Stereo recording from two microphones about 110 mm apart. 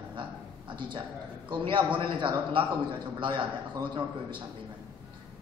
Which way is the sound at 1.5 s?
45° right (ahead or behind).